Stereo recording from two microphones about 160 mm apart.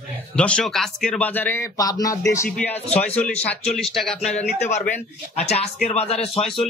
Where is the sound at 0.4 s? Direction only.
5° left (ahead or behind); by 2.1 s 20° left (ahead or behind).